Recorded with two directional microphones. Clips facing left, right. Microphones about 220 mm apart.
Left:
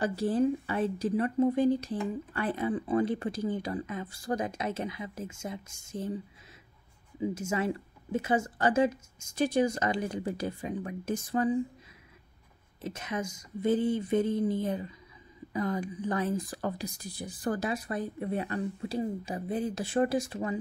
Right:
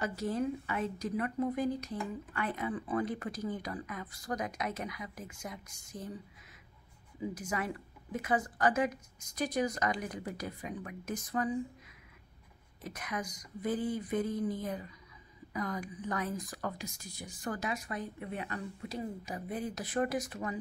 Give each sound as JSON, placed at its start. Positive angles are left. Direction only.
{"t": 0.0, "sound": "speech", "side_deg": 30}
{"t": 7.2, "sound": "speech", "side_deg": 25}
{"t": 12.8, "sound": "speech", "side_deg": 25}